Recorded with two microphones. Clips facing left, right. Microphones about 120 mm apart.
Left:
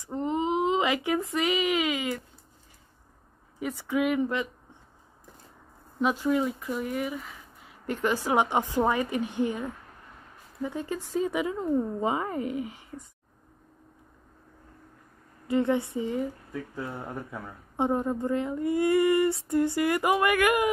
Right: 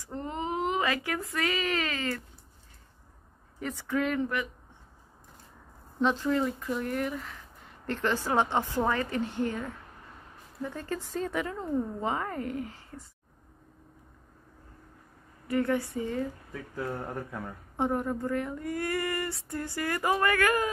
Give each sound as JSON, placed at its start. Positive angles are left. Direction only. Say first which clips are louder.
{"t": 0.0, "sound": "speech", "louder": "left 6 dB", "side_deg": 15}
{"t": 3.5, "sound": "speech", "louder": "left 2 dB", "side_deg": 10}
{"t": 5.9, "sound": "speech", "louder": "left 1 dB", "side_deg": 10}
{"t": 15.4, "sound": "a sound", "louder": "left 3 dB", "side_deg": 20}
{"t": 16.0, "sound": "speech", "louder": "left 2 dB", "side_deg": 15}
{"t": 17.0, "sound": "speech", "louder": "even", "side_deg": 0}
{"t": 17.7, "sound": "a sound", "louder": "left 3 dB", "side_deg": 20}